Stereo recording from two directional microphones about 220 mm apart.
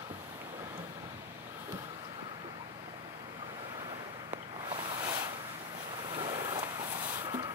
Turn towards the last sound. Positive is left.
turn(degrees=-20)  # may be behind; listen again after turning